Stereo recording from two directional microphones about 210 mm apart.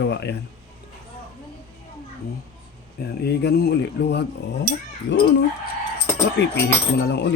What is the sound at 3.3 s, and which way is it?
Speech, 50° left (ahead or behind).